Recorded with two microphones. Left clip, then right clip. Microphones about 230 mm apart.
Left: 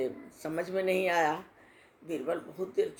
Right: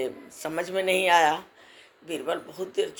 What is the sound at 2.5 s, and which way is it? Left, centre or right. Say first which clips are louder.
Speech: right 3 dB; right.